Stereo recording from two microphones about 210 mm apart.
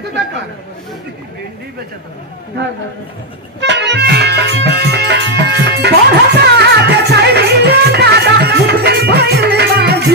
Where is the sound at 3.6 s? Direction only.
55° right (ahead or behind).